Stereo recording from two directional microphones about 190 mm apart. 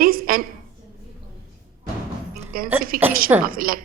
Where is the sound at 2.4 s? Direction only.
50° right (ahead or behind).